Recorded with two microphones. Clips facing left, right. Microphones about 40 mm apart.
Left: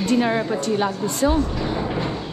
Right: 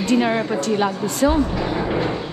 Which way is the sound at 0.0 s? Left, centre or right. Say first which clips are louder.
Right 1 dB; right.